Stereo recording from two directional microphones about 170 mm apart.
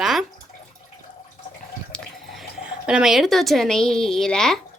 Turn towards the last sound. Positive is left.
turn(degrees=5)  # may be behind; listen again after turning